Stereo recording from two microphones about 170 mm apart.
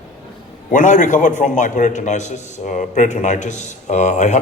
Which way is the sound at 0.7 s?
50° left (ahead or behind).